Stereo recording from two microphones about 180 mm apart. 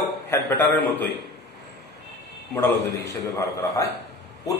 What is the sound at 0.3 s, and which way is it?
Speech, 10° left (ahead or behind).